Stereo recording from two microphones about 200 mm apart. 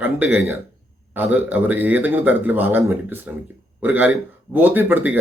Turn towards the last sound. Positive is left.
turn(degrees=-10)  # may be behind; listen again after turning